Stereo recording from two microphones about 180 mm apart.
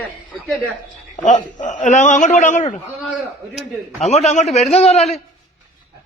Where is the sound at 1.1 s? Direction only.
45° left (ahead or behind).